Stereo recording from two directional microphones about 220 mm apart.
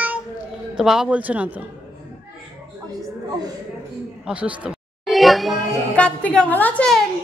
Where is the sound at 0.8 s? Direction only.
Centre (ahead or behind).